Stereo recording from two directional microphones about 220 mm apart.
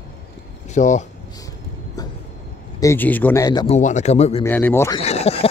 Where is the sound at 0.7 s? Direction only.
35° left (ahead or behind).